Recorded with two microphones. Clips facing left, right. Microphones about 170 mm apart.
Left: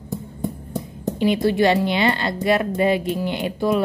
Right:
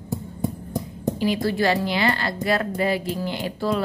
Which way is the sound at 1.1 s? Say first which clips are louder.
Left 5 dB; 20° left (ahead or behind).